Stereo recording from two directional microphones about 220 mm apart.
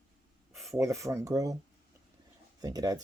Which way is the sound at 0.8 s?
15° right (ahead or behind).